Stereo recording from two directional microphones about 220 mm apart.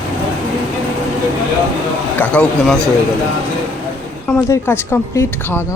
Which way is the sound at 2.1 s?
5° left (ahead or behind).